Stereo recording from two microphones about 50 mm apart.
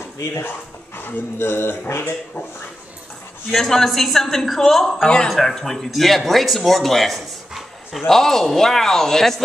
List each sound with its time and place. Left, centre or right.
0.4 s speech: left
3.5 s a woman's voice: centre
5.0 s speech: centre
5.3 s speech: centre